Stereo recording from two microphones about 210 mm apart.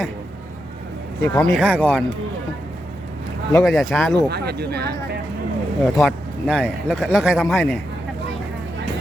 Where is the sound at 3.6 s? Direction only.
Centre (ahead or behind).